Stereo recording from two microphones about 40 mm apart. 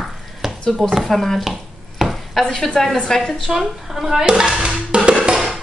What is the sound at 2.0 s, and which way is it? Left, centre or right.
Chopping, centre.